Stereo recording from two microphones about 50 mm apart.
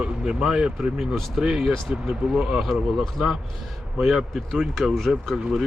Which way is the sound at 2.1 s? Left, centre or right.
Centre.